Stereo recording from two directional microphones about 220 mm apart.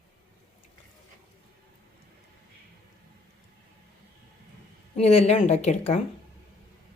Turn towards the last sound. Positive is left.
turn(degrees=30)  # may be behind; listen again after turning